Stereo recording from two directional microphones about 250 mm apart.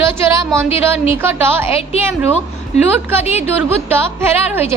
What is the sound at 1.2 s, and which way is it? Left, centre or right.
Speech, centre.